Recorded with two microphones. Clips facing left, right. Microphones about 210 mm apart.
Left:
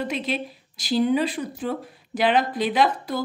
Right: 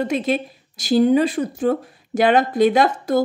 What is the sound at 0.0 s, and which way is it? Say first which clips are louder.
Speech: right 6 dB; 45° right (ahead or behind).